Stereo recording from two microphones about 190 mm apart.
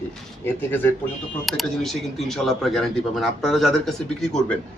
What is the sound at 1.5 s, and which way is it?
A man's voice, centre (ahead or behind).